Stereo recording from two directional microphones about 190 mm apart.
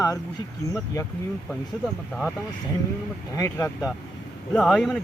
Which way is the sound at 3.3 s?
15° left (ahead or behind).